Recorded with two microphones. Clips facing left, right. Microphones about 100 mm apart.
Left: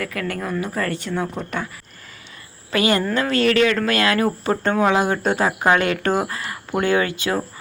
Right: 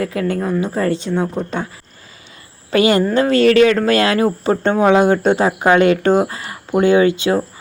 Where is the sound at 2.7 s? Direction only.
30° right (ahead or behind).